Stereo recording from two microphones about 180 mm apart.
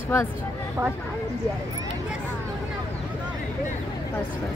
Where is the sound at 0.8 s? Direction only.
10° right (ahead or behind).